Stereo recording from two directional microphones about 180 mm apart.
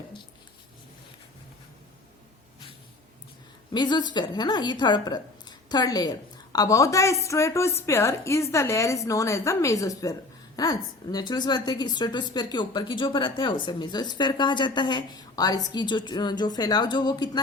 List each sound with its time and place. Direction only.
3.7 s a woman's voice: 25° left (ahead or behind)